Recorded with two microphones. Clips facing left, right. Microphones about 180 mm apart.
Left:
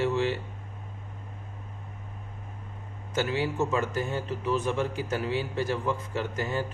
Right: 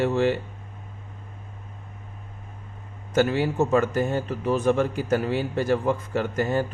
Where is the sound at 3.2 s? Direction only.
50° right (ahead or behind).